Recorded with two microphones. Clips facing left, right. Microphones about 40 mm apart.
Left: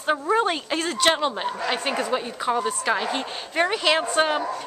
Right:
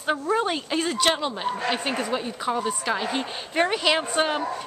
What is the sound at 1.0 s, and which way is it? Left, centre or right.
A woman's voice, centre.